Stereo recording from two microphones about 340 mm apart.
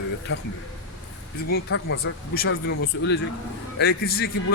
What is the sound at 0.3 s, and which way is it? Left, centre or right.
Speech, left.